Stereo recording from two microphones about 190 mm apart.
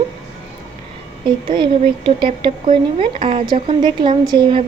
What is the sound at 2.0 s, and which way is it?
A woman's voice, 25° right (ahead or behind).